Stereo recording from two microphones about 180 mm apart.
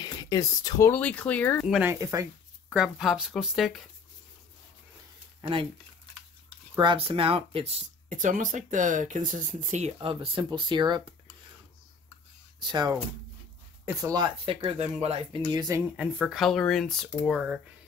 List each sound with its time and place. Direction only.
0.0 s speech: 25° left (ahead or behind)
1.7 s speech: 10° right (ahead or behind)
2.7 s speech: centre (ahead or behind)
6.8 s speech: 30° right (ahead or behind)
8.1 s speech: 45° right (ahead or behind); by 11.1 s 25° right (ahead or behind)
12.6 s speech: 20° right (ahead or behind)
14.4 s speech: 30° right (ahead or behind)
16.0 s speech: centre (ahead or behind)